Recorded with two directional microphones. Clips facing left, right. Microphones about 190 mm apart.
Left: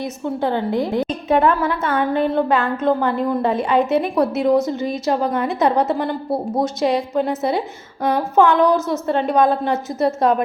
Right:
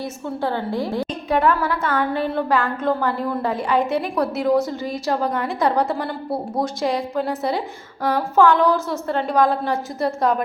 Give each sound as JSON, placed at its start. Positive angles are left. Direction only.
{"t": 0.4, "sound": "a woman's voice", "side_deg": 20}